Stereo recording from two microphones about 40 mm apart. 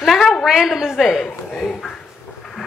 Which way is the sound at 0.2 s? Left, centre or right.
Centre.